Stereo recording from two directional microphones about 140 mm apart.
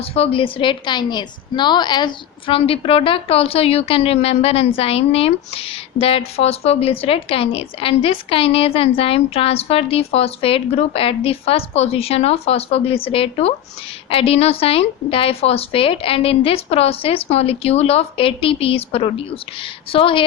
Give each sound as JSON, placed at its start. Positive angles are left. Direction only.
{"t": 0.1, "sound": "a woman's voice", "side_deg": 40}